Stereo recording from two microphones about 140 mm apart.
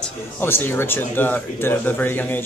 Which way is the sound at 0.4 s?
15° left (ahead or behind).